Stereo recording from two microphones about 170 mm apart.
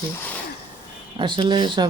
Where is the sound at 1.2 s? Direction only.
30° right (ahead or behind).